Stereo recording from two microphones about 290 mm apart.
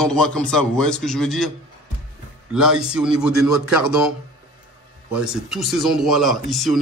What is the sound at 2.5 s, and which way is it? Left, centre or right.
Speech, centre.